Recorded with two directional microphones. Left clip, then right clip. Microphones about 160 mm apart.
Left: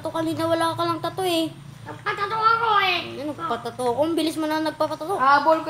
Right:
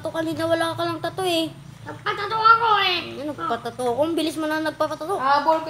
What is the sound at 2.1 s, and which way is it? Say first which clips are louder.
Speech: right 3 dB; 45° right (ahead or behind).